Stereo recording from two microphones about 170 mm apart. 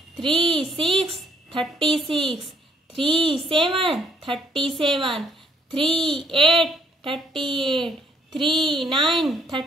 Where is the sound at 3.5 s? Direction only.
30° right (ahead or behind).